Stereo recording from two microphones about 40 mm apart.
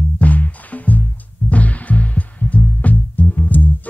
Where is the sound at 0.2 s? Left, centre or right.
Left.